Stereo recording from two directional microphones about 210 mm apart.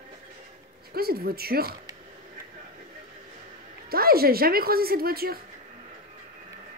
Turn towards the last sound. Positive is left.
turn(degrees=-45)  # may be behind; listen again after turning